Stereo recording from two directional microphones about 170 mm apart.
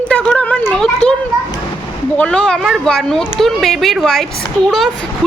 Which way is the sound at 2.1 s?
5° left (ahead or behind).